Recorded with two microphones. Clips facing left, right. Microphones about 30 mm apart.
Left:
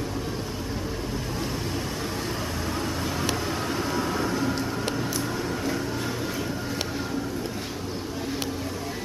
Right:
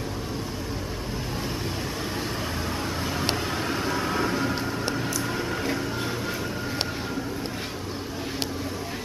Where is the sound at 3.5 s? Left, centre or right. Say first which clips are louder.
Even; centre.